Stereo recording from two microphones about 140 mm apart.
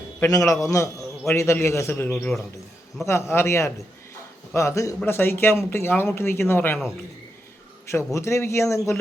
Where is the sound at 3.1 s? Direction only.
20° left (ahead or behind).